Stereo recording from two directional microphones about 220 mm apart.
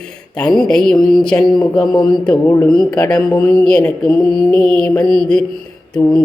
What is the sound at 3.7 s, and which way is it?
Mantra, 5° left (ahead or behind).